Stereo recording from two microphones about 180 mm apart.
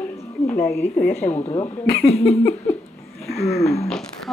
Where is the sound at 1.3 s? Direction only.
25° left (ahead or behind).